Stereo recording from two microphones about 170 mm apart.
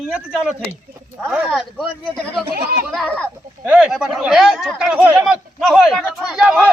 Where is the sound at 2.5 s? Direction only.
60° right (ahead or behind).